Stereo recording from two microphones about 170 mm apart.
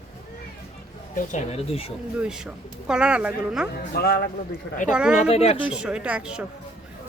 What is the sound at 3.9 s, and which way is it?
Speech, 65° left (ahead or behind).